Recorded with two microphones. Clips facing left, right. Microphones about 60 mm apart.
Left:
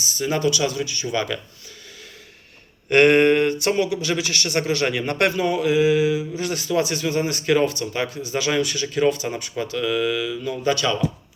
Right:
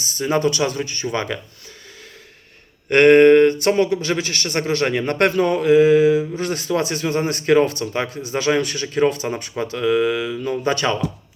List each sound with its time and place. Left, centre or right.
0.0 s speech: right
2.9 s speech: right